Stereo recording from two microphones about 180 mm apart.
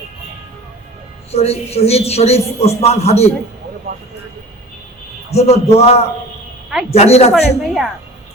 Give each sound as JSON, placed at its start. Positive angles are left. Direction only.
{"t": 1.3, "sound": "a man's voice", "side_deg": 35}
{"t": 5.3, "sound": "a man's voice", "side_deg": 35}
{"t": 7.6, "sound": "a woman's voice", "side_deg": 0}